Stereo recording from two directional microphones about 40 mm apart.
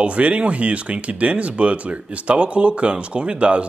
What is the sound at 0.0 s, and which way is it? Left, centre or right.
Speech, right.